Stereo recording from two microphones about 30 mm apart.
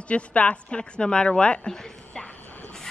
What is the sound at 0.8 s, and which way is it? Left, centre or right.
Speech, left.